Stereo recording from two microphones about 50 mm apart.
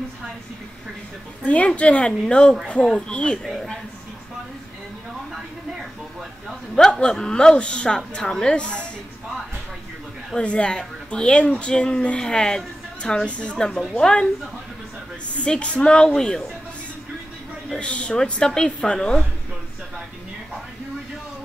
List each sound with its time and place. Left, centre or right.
1.4 s a woman's voice: left
3.4 s a woman's voice: centre
6.7 s a man's voice: centre
10.3 s a woman's voice: left
15.4 s a man's voice: left
17.7 s a man's voice: left